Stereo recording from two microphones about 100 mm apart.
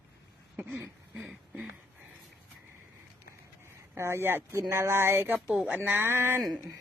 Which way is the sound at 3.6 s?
25° right (ahead or behind).